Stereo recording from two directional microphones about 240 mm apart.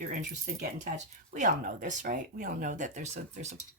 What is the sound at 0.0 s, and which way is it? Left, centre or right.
Speech, right.